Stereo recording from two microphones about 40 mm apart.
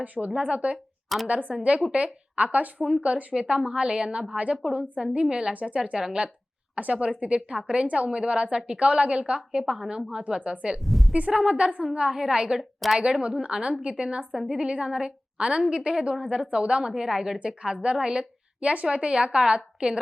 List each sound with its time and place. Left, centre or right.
0.0 s a woman's voice: right
5.8 s a woman's voice: centre
6.7 s a woman's voice: right
9.6 s a woman's voice: centre
9.9 s a woman's voice: centre
10.8 s a sound: centre
11.3 s a woman's voice: right
12.5 s a woman's voice: centre
13.0 s a woman's voice: right
17.0 s a woman's voice: centre
17.4 s a woman's voice: right